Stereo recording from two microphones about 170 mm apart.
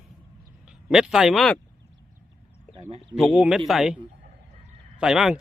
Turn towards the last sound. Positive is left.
turn(degrees=-5)  # may be behind; listen again after turning